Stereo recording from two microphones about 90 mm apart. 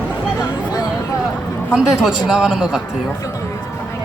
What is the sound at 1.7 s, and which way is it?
Speech, 5° right (ahead or behind).